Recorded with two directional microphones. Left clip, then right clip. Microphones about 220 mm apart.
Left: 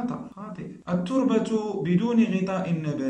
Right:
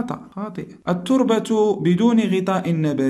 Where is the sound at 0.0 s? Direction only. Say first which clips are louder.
Right 5 dB; 45° right (ahead or behind).